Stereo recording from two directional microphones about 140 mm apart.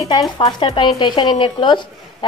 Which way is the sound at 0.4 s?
35° left (ahead or behind).